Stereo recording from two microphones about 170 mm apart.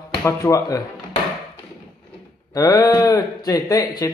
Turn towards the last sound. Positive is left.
turn(degrees=20)  # may be behind; listen again after turning